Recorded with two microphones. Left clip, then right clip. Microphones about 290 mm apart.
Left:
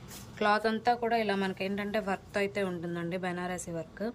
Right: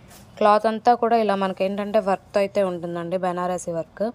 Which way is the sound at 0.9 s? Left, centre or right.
Right.